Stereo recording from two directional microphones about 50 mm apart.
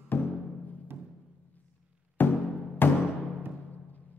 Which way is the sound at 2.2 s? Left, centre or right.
Left.